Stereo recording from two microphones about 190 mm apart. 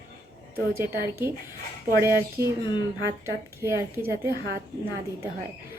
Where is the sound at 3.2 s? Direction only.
15° right (ahead or behind).